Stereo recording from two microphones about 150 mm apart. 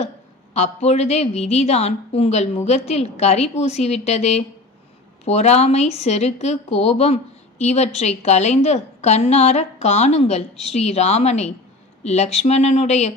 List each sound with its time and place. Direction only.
0.5 s a woman's voice: 45° left (ahead or behind)